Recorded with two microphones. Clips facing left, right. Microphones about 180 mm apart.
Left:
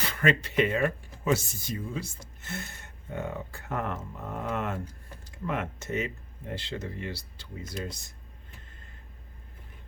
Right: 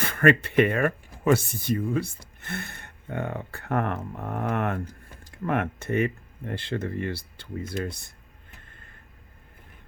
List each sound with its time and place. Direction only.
0.0 s speech: 55° right (ahead or behind)